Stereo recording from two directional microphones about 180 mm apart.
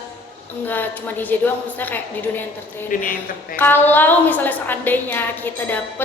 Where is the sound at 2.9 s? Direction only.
50° left (ahead or behind).